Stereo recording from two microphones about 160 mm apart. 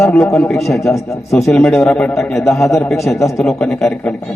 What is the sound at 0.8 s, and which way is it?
Speech, 20° left (ahead or behind).